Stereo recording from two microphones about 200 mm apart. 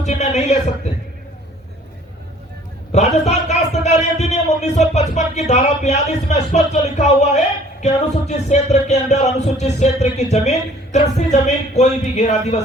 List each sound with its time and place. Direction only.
0.0 s a man's voice: 35° left (ahead or behind)
2.9 s a man's voice: 35° left (ahead or behind)